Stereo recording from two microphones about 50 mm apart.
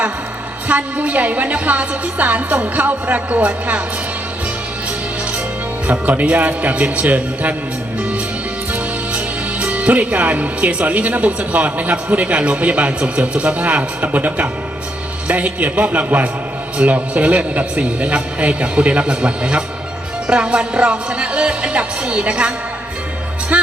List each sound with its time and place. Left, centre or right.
0.7 s a woman's voice: right
5.9 s a woman's voice: right
8.7 s a man's voice: right